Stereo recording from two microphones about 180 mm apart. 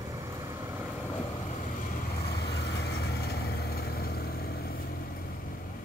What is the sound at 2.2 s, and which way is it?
Vehicle, 65° left (ahead or behind).